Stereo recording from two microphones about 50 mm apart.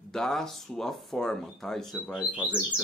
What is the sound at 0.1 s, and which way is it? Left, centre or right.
Speech, centre.